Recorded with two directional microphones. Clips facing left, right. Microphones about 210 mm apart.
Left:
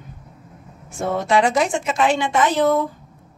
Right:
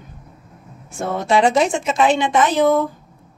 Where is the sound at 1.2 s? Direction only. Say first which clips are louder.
Right 3 dB; 25° right (ahead or behind).